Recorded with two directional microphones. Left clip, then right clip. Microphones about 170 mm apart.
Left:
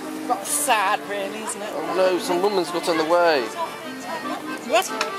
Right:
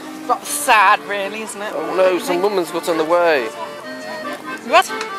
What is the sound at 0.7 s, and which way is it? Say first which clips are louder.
Music: right 8 dB; 15° right (ahead or behind).